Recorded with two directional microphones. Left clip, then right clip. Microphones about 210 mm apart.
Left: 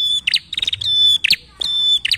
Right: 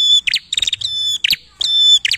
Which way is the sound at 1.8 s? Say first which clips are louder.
Right 5 dB; 25° right (ahead or behind).